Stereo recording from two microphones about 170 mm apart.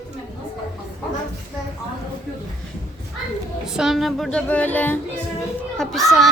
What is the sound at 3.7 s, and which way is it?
A child's voice, centre (ahead or behind).